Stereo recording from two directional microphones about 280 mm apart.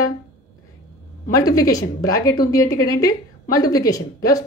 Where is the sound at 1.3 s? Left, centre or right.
Centre.